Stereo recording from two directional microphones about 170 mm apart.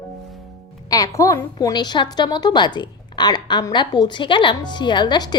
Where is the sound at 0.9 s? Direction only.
20° left (ahead or behind).